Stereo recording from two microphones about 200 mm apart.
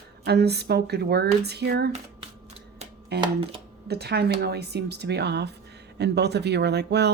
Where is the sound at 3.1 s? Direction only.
55° right (ahead or behind).